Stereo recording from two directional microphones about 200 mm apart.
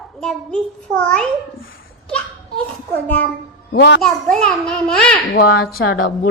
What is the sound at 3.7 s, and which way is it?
Speech, 60° left (ahead or behind).